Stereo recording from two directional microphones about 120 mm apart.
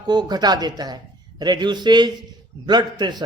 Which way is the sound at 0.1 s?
35° right (ahead or behind).